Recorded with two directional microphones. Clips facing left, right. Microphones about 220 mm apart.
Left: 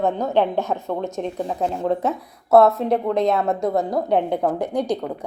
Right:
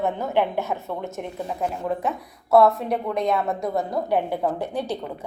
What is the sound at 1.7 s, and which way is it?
A woman's voice, 30° left (ahead or behind).